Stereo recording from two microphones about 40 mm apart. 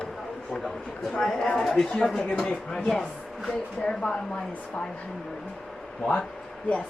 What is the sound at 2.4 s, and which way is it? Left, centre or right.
Speech, left.